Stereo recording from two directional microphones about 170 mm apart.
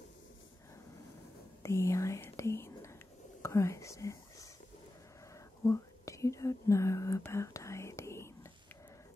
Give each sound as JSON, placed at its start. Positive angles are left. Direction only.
{"t": 1.6, "sound": "whispering", "side_deg": 15}
{"t": 5.6, "sound": "whispering", "side_deg": 20}